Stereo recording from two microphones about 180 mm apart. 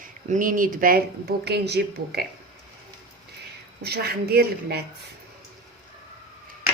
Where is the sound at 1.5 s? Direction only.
65° right (ahead or behind).